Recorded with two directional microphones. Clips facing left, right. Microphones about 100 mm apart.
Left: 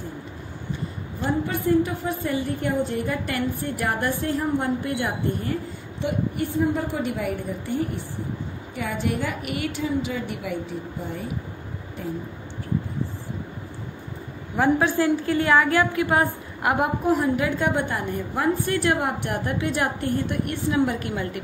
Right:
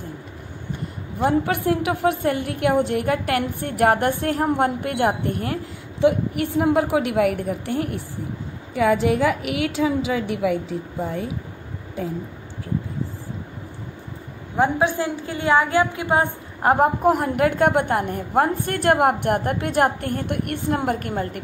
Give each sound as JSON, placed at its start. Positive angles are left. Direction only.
{"t": 1.2, "sound": "a woman's voice", "side_deg": -70}
{"t": 14.6, "sound": "a woman's voice", "side_deg": -20}
{"t": 16.7, "sound": "a woman's voice", "side_deg": -50}